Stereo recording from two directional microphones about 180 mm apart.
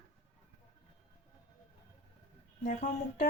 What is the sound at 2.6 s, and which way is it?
Speech, 45° left (ahead or behind).